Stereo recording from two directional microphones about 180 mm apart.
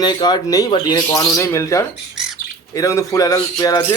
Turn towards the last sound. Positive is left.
turn(degrees=20)  # may be behind; listen again after turning